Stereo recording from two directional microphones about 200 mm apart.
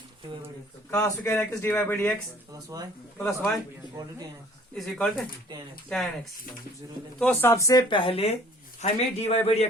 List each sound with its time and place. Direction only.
0.9 s speech: 15° left (ahead or behind)
2.5 s speech: 20° right (ahead or behind)
3.2 s speech: 5° left (ahead or behind)
4.7 s speech: centre (ahead or behind)
7.2 s a man's voice: 10° left (ahead or behind); by 9.6 s 30° left (ahead or behind)